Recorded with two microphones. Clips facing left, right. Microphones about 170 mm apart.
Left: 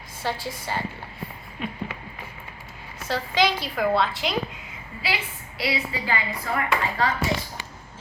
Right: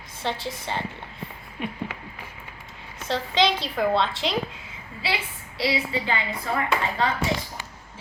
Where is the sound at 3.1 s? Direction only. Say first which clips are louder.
Right 1 dB; 25° right (ahead or behind).